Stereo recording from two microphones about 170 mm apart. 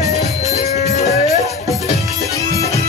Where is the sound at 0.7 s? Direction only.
40° left (ahead or behind).